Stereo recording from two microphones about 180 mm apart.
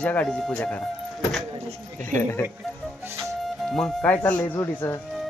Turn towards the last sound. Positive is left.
turn(degrees=15)  # may be behind; listen again after turning